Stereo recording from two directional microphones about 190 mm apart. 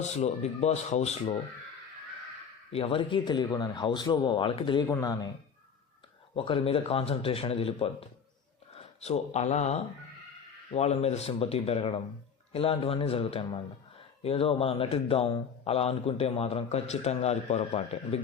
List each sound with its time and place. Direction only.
0.0 s speech: 35° left (ahead or behind)
2.7 s a man's voice: 30° left (ahead or behind)
6.3 s a man's voice: 25° left (ahead or behind)
9.0 s a man's voice: 35° left (ahead or behind)